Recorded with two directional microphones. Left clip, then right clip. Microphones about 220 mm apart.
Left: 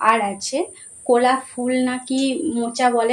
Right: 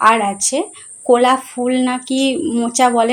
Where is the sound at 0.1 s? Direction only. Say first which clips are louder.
Right 3 dB; 40° right (ahead or behind).